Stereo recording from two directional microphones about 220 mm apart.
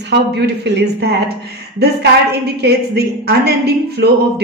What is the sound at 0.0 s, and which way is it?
A woman's voice, 50° right (ahead or behind).